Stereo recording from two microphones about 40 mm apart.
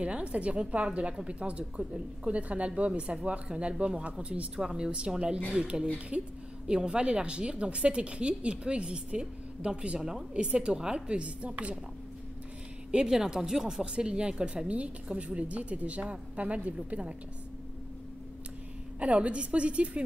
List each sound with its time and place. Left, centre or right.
0.0 s a woman's voice: right
9.9 s speech: centre
10.3 s a woman's voice: right
13.1 s speech: centre
13.9 s a woman's voice: right
18.9 s a woman's voice: right